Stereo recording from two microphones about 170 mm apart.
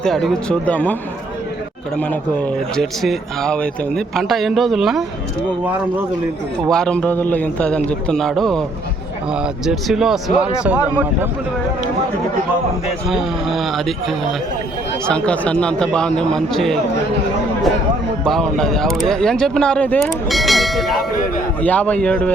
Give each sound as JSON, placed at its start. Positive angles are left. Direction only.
{"t": 0.0, "sound": "speech", "side_deg": 5}
{"t": 2.0, "sound": "speech", "side_deg": 5}
{"t": 6.7, "sound": "a man's voice", "side_deg": 5}
{"t": 10.8, "sound": "speech", "side_deg": 20}
{"t": 13.1, "sound": "speech", "side_deg": 0}
{"t": 18.3, "sound": "a man's voice", "side_deg": 0}